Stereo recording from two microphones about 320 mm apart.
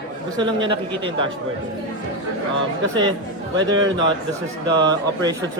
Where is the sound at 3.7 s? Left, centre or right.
Right.